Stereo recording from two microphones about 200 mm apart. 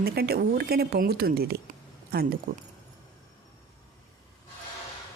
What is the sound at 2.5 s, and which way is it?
Speech, 60° right (ahead or behind).